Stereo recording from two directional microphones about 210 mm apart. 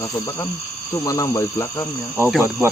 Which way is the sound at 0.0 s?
15° left (ahead or behind).